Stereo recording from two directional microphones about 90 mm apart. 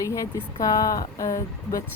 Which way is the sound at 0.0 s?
35° left (ahead or behind).